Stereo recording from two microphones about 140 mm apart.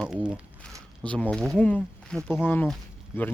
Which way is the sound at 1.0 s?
5° left (ahead or behind).